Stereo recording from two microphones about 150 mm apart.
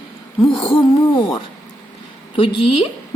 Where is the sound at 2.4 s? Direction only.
35° left (ahead or behind).